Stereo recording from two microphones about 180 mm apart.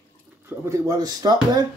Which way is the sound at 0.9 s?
20° right (ahead or behind).